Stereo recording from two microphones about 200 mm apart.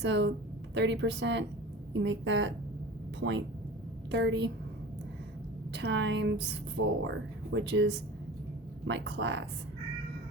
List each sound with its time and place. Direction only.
0.0 s a woman's voice: 60° right (ahead or behind)
5.7 s a woman's voice: 60° right (ahead or behind)